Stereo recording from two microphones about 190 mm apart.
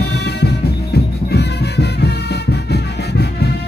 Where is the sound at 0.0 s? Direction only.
60° left (ahead or behind).